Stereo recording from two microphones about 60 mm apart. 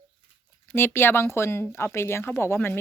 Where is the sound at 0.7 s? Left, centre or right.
Left.